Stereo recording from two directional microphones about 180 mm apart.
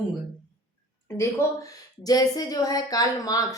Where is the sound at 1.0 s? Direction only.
15° left (ahead or behind).